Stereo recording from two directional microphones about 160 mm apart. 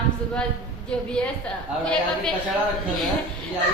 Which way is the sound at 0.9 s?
5° left (ahead or behind).